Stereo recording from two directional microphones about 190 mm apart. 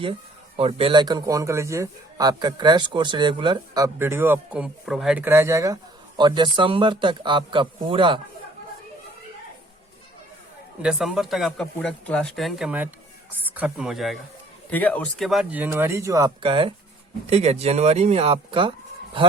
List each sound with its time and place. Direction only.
0.0 s speech: 30° right (ahead or behind)
10.8 s speech: 5° right (ahead or behind); by 19.3 s 30° right (ahead or behind)